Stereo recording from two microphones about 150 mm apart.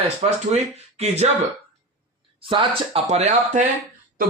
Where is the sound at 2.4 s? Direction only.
35° right (ahead or behind).